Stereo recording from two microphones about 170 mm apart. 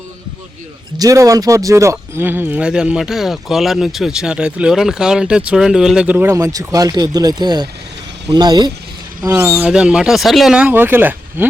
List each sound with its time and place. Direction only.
0.9 s speech: 20° right (ahead or behind)